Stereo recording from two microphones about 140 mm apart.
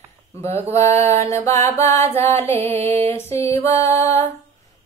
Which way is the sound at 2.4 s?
15° left (ahead or behind).